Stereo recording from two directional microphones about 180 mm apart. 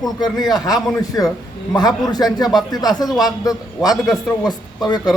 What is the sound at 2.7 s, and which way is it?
A man's voice, 20° left (ahead or behind).